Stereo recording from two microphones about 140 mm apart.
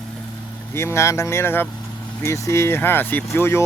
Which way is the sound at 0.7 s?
20° left (ahead or behind).